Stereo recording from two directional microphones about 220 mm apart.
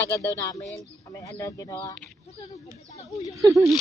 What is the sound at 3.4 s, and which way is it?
Speech, 15° right (ahead or behind).